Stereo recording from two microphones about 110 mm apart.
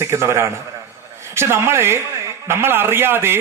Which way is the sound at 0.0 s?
25° right (ahead or behind).